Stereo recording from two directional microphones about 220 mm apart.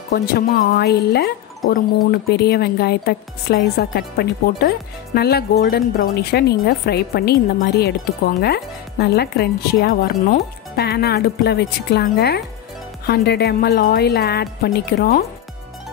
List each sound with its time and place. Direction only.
0.1 s speech: 45° left (ahead or behind)